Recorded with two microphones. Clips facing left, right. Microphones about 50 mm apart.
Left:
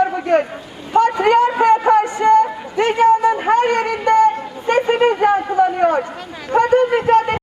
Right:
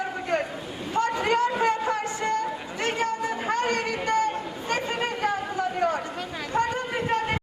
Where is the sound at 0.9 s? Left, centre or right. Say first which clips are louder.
Left 11 dB; left.